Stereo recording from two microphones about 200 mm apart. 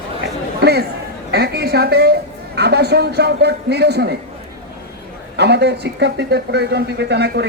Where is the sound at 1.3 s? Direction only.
55° right (ahead or behind).